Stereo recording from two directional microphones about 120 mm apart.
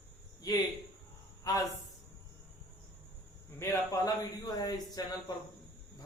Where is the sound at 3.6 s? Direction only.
20° left (ahead or behind).